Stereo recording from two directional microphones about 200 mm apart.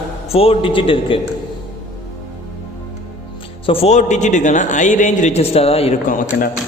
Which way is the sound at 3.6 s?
30° left (ahead or behind).